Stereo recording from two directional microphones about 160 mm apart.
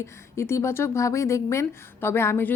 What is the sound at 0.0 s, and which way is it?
Speech, 15° left (ahead or behind).